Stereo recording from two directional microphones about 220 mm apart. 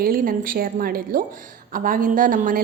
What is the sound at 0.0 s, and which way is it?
A woman's voice, 40° right (ahead or behind).